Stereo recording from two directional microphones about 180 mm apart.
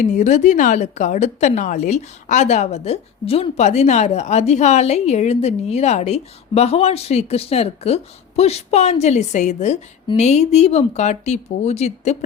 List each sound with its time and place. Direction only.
0.0 s a woman's voice: 40° left (ahead or behind)